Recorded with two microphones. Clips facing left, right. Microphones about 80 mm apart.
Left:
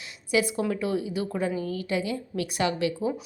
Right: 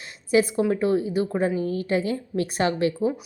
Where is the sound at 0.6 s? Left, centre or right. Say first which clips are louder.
Right 5 dB; right.